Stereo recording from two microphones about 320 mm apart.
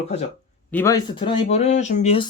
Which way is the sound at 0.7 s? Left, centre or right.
Centre.